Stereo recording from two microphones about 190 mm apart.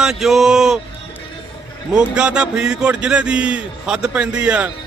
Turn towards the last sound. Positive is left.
turn(degrees=-5)  # may be behind; listen again after turning